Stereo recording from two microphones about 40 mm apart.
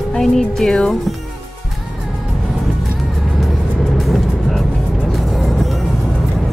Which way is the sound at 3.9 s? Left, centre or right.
Centre.